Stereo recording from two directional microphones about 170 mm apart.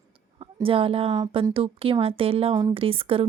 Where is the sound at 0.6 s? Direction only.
35° right (ahead or behind).